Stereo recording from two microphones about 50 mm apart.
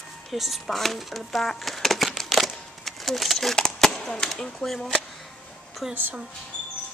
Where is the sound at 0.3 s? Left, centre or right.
Centre.